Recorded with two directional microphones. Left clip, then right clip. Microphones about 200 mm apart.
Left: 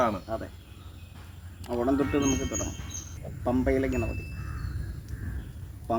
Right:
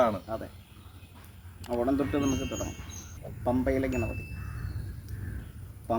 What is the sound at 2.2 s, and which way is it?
Speech, centre (ahead or behind).